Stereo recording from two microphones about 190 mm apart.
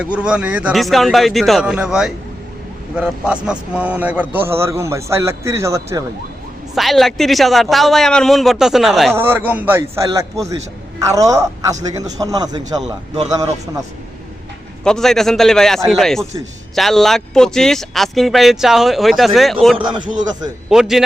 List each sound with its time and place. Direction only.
0.0 s a man's voice: 5° right (ahead or behind)
6.7 s a man's voice: centre (ahead or behind); by 12.8 s 20° right (ahead or behind)
14.8 s speech: centre (ahead or behind)
19.8 s a man's voice: 25° right (ahead or behind)
20.7 s speech: centre (ahead or behind)